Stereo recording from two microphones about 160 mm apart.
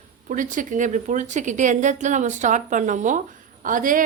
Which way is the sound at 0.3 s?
55° right (ahead or behind).